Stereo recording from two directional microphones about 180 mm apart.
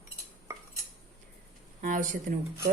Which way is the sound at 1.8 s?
45° right (ahead or behind).